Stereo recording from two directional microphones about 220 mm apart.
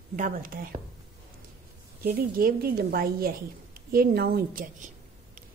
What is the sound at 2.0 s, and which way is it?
A woman's voice, 40° right (ahead or behind).